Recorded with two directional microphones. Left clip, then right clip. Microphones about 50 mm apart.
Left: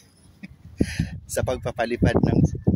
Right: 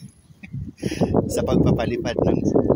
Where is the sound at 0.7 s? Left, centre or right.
Left.